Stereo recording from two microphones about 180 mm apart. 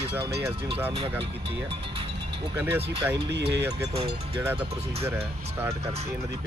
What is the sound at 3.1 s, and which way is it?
Speech, 70° right (ahead or behind).